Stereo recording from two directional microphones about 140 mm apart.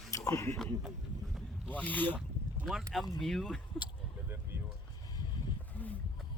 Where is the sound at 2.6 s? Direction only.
Centre (ahead or behind).